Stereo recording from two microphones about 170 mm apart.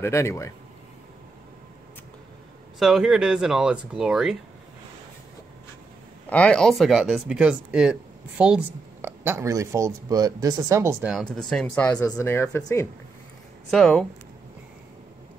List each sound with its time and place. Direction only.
0.0 s speech: 15° left (ahead or behind)
2.8 s speech: centre (ahead or behind)
6.2 s speech: 5° left (ahead or behind); by 11.1 s 15° right (ahead or behind)
11.1 s speech: centre (ahead or behind)
13.7 s speech: 5° left (ahead or behind)